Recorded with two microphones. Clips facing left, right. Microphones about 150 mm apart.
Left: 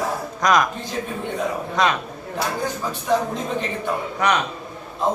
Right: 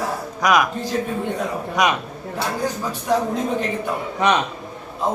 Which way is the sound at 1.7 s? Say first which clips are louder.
Right 1 dB; 15° right (ahead or behind).